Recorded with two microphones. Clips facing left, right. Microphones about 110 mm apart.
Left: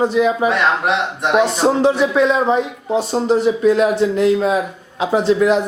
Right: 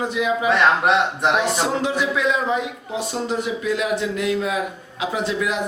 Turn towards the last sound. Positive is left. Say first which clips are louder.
# left 9 dB
turn(degrees=35)  # may be behind; listen again after turning